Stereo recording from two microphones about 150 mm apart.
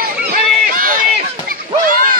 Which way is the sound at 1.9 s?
65° right (ahead or behind).